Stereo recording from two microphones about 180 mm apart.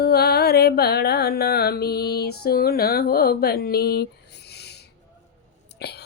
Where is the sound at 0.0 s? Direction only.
60° left (ahead or behind).